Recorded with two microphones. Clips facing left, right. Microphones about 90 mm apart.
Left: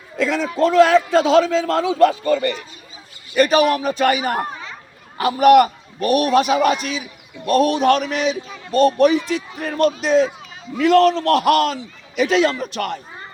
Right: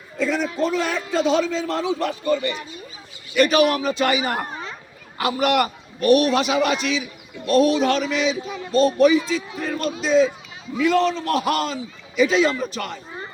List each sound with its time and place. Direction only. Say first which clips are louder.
0.2 s a man's voice: left 4 dB; 90° left
3.3 s a man's voice: left 2 dB; 40° left (ahead or behind)
5.5 s a man's voice: left 9 dB; 45° left (ahead or behind)
8.4 s speech: right 5 dB; 10° right (ahead or behind)
8.7 s a man's voice: left 2 dB; 60° left (ahead or behind)
10.8 s a man's voice: left 5 dB; 70° left (ahead or behind)